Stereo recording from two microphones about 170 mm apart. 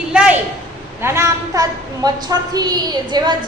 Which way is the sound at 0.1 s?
5° right (ahead or behind).